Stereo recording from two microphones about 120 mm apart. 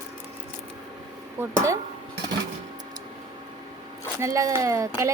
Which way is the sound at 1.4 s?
20° right (ahead or behind).